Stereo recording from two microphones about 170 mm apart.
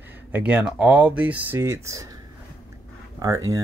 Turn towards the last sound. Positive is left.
turn(degrees=-20)  # may be behind; listen again after turning